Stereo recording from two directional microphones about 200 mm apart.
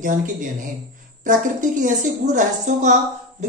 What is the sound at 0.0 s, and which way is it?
Speech, 40° right (ahead or behind).